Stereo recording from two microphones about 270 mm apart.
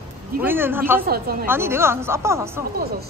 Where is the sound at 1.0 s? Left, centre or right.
Right.